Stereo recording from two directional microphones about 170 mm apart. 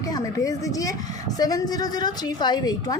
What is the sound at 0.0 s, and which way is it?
A woman's voice, 20° left (ahead or behind).